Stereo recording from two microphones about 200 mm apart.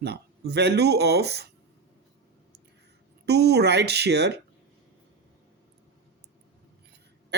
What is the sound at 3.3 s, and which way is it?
Speech, 55° right (ahead or behind).